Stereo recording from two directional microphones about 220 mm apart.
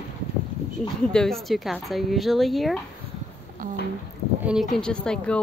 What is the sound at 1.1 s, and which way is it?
Speech, centre (ahead or behind).